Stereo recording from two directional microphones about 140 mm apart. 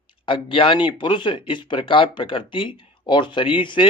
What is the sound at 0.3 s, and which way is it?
Speech, 40° left (ahead or behind).